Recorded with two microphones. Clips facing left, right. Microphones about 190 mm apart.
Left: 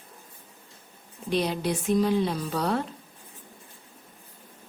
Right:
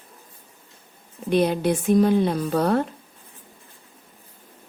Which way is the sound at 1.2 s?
55° right (ahead or behind).